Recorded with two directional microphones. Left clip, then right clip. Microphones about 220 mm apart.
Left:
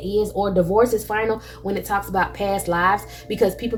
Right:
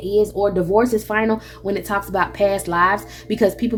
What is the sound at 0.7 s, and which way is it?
Speech, 35° right (ahead or behind).